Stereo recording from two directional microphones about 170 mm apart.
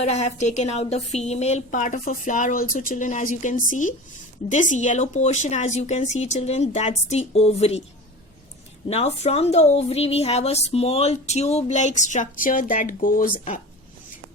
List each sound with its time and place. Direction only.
0.0 s a woman's voice: 40° left (ahead or behind)
8.9 s speech: 40° left (ahead or behind)